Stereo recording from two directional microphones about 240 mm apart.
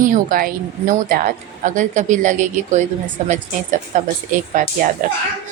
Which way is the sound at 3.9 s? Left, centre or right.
Right.